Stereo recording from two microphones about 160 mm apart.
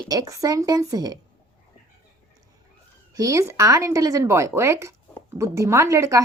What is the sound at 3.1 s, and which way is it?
A woman's voice, 20° right (ahead or behind).